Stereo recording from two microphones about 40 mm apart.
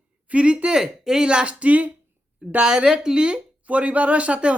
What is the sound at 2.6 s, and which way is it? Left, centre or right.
Speech, right.